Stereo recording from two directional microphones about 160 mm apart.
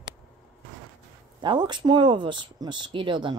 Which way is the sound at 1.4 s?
30° right (ahead or behind).